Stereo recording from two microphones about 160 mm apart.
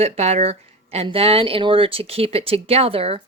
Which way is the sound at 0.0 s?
45° right (ahead or behind).